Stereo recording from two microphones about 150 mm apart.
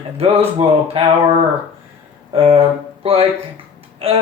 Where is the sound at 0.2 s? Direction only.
40° right (ahead or behind).